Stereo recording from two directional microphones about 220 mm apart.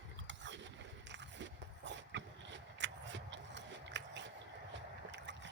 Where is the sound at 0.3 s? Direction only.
55° right (ahead or behind).